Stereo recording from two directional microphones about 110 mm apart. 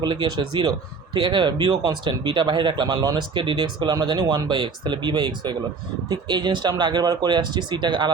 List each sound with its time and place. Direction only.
0.0 s speech: 40° right (ahead or behind)